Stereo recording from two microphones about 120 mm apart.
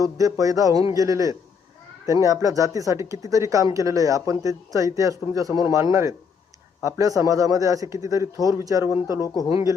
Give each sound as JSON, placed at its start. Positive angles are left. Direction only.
{"t": 0.0, "sound": "speech", "side_deg": -30}
{"t": 9.2, "sound": "speech", "side_deg": 30}
{"t": 9.5, "sound": "speech", "side_deg": -30}